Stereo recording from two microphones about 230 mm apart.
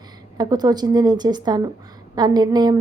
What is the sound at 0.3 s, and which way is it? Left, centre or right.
A woman's voice, centre.